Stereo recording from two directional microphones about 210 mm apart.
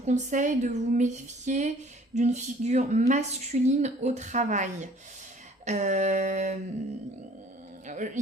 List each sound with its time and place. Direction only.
0.0 s a woman's voice: 35° right (ahead or behind)
7.9 s a woman's voice: 35° right (ahead or behind)